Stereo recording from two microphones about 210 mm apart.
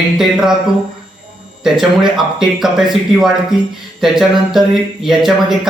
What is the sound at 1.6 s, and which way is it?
Speech, centre (ahead or behind).